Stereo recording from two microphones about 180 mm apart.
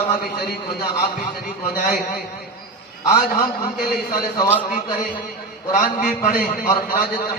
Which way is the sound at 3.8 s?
55° left (ahead or behind).